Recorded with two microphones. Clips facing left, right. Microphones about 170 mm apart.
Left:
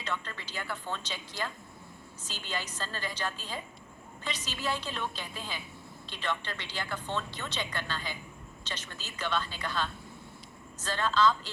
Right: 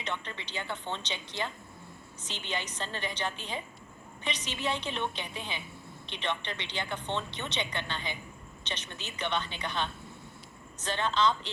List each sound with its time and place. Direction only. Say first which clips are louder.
0.0 s speech: even; 20° right (ahead or behind)